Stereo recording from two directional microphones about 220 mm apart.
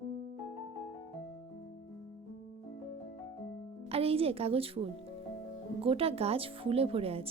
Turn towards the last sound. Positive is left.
turn(degrees=-25)  # may be behind; listen again after turning